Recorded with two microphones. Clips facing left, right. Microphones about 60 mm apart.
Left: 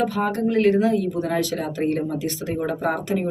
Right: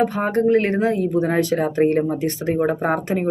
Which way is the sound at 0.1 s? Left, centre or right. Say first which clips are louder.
Right 5 dB; right.